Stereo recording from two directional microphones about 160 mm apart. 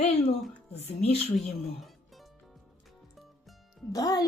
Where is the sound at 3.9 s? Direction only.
25° left (ahead or behind).